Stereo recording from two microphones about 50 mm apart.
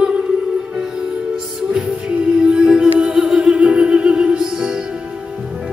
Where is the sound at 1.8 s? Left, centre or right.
Centre.